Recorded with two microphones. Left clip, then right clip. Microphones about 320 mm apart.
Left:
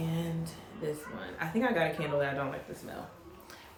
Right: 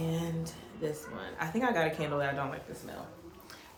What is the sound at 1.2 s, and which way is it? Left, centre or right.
Speech, centre.